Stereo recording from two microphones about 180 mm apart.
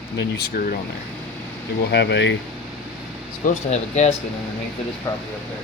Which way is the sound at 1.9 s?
75° left (ahead or behind).